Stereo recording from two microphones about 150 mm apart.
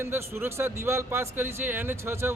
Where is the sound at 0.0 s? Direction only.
15° right (ahead or behind).